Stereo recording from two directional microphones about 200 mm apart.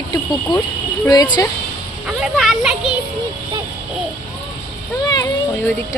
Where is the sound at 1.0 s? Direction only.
20° left (ahead or behind).